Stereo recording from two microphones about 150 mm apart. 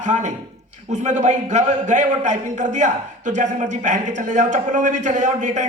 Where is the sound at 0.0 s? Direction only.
55° right (ahead or behind).